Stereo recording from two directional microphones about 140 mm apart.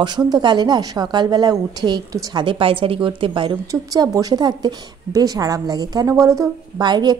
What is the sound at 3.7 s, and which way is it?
Speech, 25° right (ahead or behind).